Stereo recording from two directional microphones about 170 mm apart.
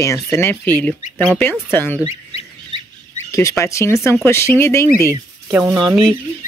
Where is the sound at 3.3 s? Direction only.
20° left (ahead or behind).